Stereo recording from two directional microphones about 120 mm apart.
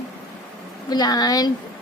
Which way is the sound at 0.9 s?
35° left (ahead or behind).